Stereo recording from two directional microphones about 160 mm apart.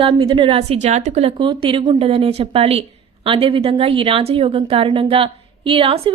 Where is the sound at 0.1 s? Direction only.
30° right (ahead or behind).